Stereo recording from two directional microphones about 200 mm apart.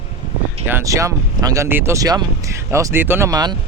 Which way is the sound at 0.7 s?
15° right (ahead or behind).